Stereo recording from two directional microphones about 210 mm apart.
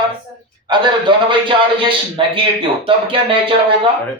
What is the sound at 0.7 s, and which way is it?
A man's voice, 25° right (ahead or behind).